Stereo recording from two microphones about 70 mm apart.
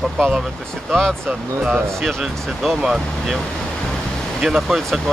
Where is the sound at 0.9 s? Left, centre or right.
Centre.